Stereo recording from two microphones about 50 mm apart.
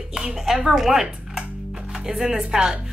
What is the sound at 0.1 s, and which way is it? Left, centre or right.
Speech, centre.